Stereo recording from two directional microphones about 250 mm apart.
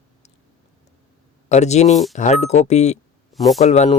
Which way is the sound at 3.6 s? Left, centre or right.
Left.